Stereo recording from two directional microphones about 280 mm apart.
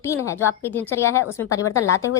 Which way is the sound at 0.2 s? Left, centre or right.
Centre.